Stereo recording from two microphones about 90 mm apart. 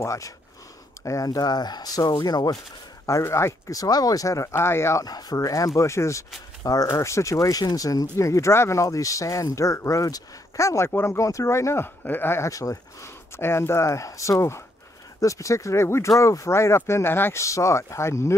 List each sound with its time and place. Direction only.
0.0 s speech: 35° left (ahead or behind)
3.1 s speech: 35° left (ahead or behind)
5.0 s speech: 45° left (ahead or behind); by 12.4 s 25° left (ahead or behind)
12.4 s speech: 40° left (ahead or behind)
13.4 s speech: 30° left (ahead or behind)